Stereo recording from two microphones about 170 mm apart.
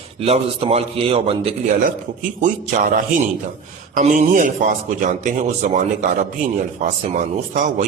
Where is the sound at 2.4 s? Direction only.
50° right (ahead or behind).